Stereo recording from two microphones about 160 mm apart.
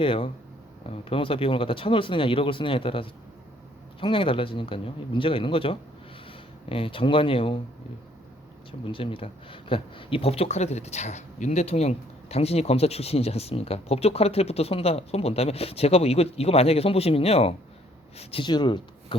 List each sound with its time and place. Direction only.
0.0 s speech: 35° left (ahead or behind)
8.8 s speech: 35° left (ahead or behind)